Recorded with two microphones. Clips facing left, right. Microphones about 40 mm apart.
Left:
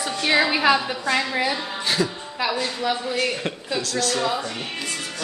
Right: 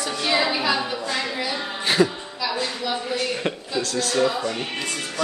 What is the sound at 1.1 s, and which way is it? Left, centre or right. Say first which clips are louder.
Speech: left 7 dB; left.